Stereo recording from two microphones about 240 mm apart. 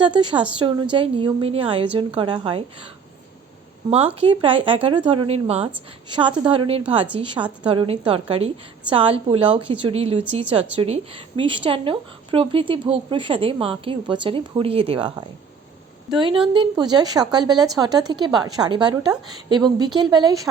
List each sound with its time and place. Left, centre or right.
0.0 s a woman's voice: centre
3.8 s a woman's voice: right